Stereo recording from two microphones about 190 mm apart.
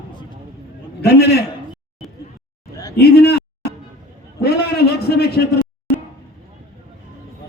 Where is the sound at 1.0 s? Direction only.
60° left (ahead or behind).